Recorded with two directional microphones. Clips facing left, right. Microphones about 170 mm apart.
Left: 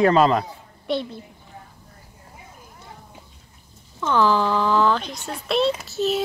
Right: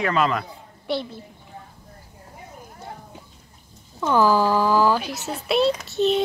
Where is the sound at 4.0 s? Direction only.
10° right (ahead or behind).